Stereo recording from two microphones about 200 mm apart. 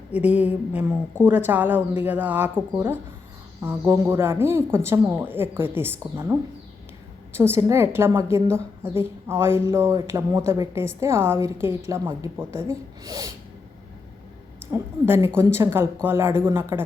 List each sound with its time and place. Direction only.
0.1 s a woman's voice: 5° right (ahead or behind)
7.3 s a woman's voice: 10° right (ahead or behind)
14.7 s a woman's voice: 10° right (ahead or behind)